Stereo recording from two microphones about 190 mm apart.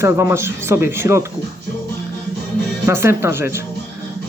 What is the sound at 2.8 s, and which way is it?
Speech, 15° right (ahead or behind).